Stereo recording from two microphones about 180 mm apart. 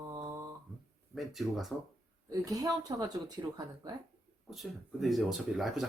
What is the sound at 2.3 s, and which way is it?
Speech, 20° right (ahead or behind).